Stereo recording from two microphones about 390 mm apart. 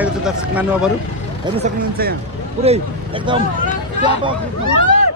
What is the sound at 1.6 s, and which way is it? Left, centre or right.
Speech, right.